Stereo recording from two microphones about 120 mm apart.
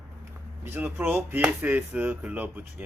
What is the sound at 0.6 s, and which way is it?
Speech, 15° right (ahead or behind).